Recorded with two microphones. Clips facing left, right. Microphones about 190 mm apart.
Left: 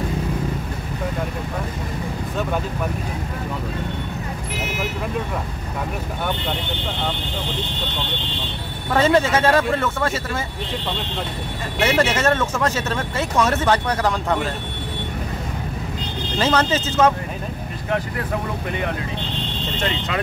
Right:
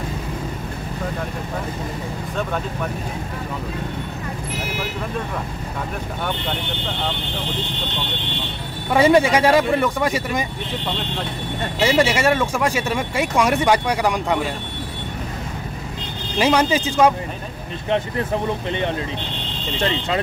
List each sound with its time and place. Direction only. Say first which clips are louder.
8.9 s speech: right 2 dB; 15° right (ahead or behind)
11.8 s speech: right 1 dB; 10° right (ahead or behind)
16.3 s speech: right 2 dB; 10° right (ahead or behind)
17.8 s speech: right 3 dB; 25° right (ahead or behind)